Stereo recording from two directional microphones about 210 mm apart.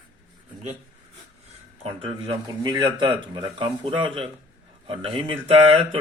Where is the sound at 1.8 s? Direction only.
25° right (ahead or behind).